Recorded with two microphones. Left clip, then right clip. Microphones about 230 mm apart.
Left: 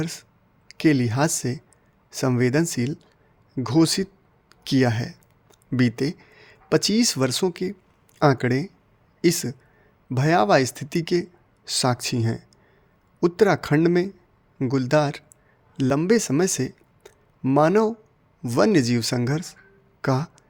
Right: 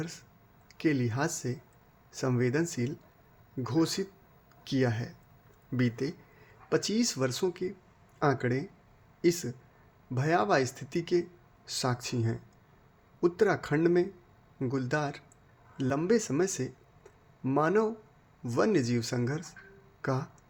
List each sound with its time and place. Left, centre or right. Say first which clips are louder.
0.0 s speech: left 9 dB; left